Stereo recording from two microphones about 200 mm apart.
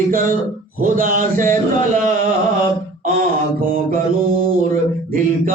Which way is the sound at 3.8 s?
45° right (ahead or behind).